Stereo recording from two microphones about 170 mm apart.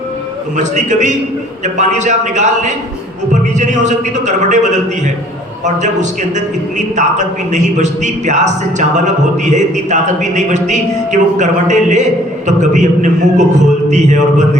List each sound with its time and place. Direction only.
0.5 s a man's voice: 45° right (ahead or behind)